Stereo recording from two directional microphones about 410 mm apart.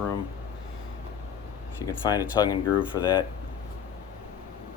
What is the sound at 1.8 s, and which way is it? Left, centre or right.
Speech, centre.